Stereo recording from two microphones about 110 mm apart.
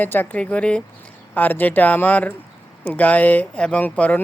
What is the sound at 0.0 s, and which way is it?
Speech, 15° left (ahead or behind).